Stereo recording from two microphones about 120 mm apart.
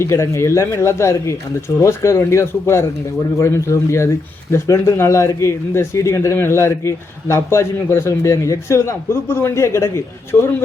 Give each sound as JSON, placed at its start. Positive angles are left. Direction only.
{"t": 0.0, "sound": "speech", "side_deg": 20}